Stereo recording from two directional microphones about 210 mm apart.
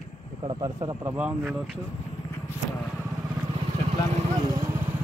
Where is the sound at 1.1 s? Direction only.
5° right (ahead or behind).